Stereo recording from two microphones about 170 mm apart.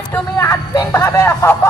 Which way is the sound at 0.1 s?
15° left (ahead or behind).